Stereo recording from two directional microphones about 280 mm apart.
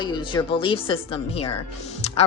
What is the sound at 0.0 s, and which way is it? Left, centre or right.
A woman's voice, centre.